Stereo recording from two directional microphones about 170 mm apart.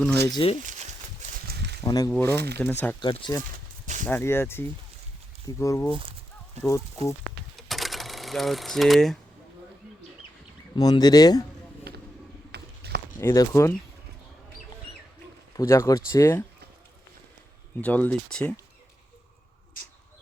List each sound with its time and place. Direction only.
0.3 s speech: 25° left (ahead or behind)
1.5 s a sound: 75° right (ahead or behind)
1.8 s speech: 20° left (ahead or behind)
2.3 s speech: 75° right (ahead or behind)
2.6 s speech: 10° left (ahead or behind)
3.0 s speech: 30° left (ahead or behind)
4.0 s speech: 15° left (ahead or behind)
7.5 s a sound: centre (ahead or behind)
10.8 s speech: 25° left (ahead or behind)
11.9 s vehicle: 70° right (ahead or behind)
12.5 s bird: 70° right (ahead or behind)
13.1 s speech: 20° left (ahead or behind)
15.5 s speech: 15° left (ahead or behind)
17.7 s speech: 10° left (ahead or behind)